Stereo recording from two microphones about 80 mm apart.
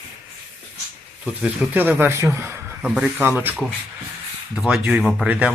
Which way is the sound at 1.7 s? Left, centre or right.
Right.